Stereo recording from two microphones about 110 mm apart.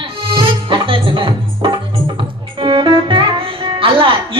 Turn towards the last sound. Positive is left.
turn(degrees=-55)  # may be behind; listen again after turning